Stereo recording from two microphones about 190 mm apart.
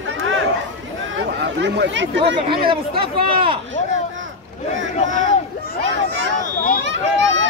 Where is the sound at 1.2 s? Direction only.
70° right (ahead or behind).